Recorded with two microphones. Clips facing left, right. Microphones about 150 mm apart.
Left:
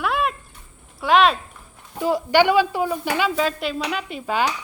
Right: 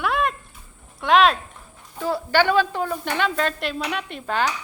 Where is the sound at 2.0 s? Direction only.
15° left (ahead or behind).